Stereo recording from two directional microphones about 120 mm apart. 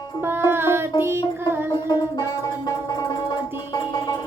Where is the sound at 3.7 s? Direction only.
35° left (ahead or behind).